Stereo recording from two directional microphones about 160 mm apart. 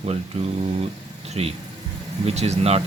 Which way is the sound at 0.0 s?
40° right (ahead or behind).